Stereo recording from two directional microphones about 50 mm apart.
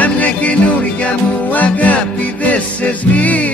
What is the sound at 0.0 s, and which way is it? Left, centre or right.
Music, left.